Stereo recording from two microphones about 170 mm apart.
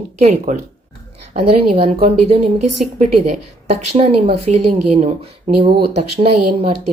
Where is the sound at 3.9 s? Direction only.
35° right (ahead or behind).